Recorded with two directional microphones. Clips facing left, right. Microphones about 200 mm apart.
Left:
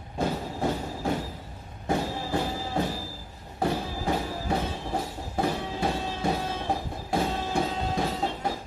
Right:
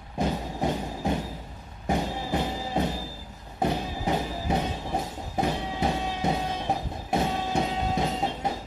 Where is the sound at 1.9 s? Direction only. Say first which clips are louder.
Even; 20° right (ahead or behind).